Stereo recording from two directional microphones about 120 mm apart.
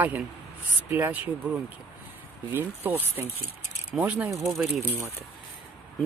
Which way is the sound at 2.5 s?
15° right (ahead or behind).